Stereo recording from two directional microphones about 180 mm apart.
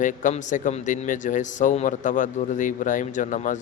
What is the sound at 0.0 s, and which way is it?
A man's voice, 45° left (ahead or behind).